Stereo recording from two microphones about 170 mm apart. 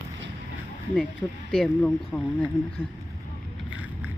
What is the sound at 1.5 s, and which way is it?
Speech, 5° left (ahead or behind).